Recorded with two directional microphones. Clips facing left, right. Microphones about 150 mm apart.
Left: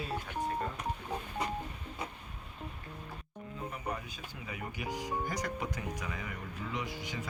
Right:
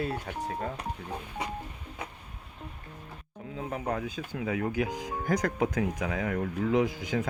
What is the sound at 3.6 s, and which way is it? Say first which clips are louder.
Speech: right 8 dB; 90° right.